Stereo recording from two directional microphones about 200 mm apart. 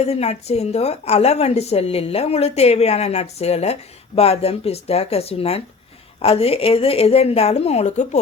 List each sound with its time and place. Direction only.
0.0 s a woman's voice: 30° left (ahead or behind)